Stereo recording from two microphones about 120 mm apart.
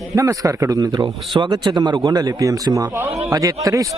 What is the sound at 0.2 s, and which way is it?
A man's voice, 25° right (ahead or behind).